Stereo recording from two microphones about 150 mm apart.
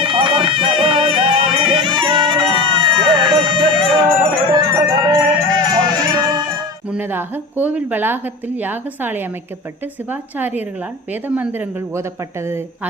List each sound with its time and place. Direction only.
0.0 s music: 35° right (ahead or behind)
6.9 s a woman's voice: 15° right (ahead or behind)